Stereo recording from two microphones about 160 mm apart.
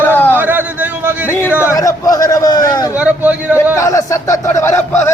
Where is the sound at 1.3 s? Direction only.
15° left (ahead or behind).